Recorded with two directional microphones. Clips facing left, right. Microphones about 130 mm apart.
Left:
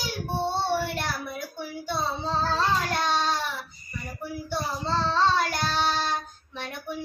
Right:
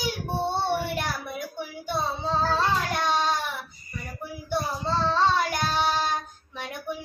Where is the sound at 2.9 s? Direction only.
15° right (ahead or behind).